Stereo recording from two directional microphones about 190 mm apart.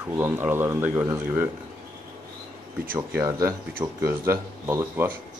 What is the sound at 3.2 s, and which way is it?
Speech, 15° right (ahead or behind).